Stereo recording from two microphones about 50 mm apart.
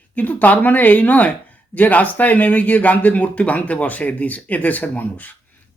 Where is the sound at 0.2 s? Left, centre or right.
Left.